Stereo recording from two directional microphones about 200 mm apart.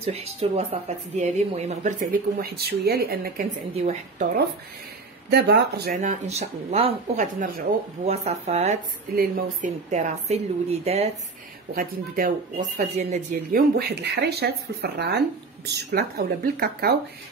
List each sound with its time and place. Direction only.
0.0 s a woman's voice: 30° right (ahead or behind); by 3.4 s 50° right (ahead or behind)
5.3 s speech: 55° right (ahead or behind)
5.9 s a woman's voice: 35° right (ahead or behind)
8.0 s a woman's voice: 30° right (ahead or behind)
9.1 s a woman's voice: 45° right (ahead or behind)
11.7 s speech: 45° right (ahead or behind)